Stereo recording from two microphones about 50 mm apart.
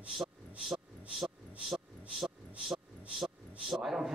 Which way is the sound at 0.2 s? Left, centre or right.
Centre.